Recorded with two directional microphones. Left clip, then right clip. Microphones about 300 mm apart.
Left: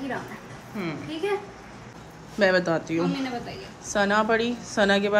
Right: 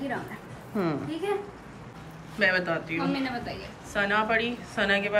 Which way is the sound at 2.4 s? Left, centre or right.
Centre.